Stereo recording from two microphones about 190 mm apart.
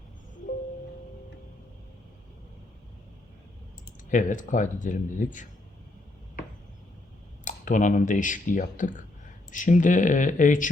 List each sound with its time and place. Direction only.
4.1 s speech: 40° left (ahead or behind)
7.4 s speech: 45° left (ahead or behind)